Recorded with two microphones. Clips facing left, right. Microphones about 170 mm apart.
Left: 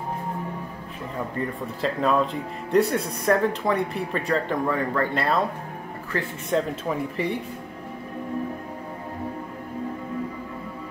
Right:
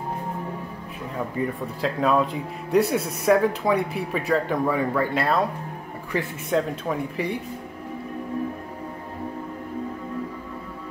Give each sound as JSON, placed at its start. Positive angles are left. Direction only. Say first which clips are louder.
{"t": 1.3, "sound": "speech", "louder": "right 2 dB", "side_deg": -5}
{"t": 6.1, "sound": "speech", "louder": "right 2 dB", "side_deg": -15}
{"t": 6.5, "sound": "speech", "louder": "right 1 dB", "side_deg": 0}